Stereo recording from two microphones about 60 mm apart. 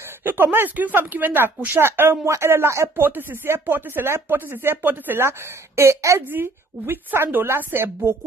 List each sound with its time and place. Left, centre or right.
0.2 s speech: right
3.0 s speech: right
5.2 s speech: right
6.2 s speech: right